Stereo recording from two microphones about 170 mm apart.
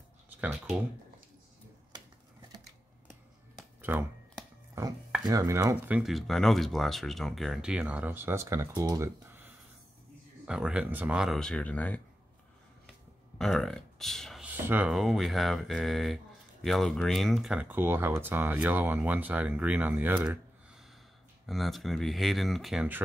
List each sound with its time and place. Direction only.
0.4 s speech: 5° right (ahead or behind)
3.5 s a sound: 5° right (ahead or behind)
5.2 s speech: 20° right (ahead or behind)
5.9 s speech: centre (ahead or behind)
13.4 s speech: 5° left (ahead or behind)
14.5 s speech: 10° right (ahead or behind)